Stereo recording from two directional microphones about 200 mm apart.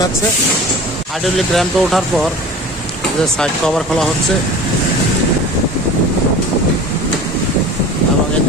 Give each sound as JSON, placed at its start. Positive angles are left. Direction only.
{"t": 1.2, "sound": "speech", "side_deg": 0}
{"t": 3.3, "sound": "speech", "side_deg": 5}